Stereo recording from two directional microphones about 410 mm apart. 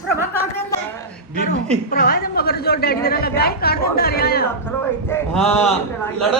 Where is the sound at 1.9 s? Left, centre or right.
Left.